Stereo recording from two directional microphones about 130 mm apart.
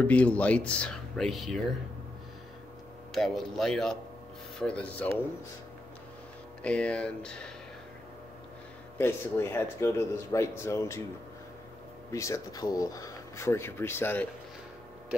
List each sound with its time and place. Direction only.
0.0 s speech: 10° left (ahead or behind)
3.2 s speech: centre (ahead or behind)
6.6 s speech: 10° left (ahead or behind)
8.9 s speech: 20° left (ahead or behind)
12.1 s speech: 25° left (ahead or behind)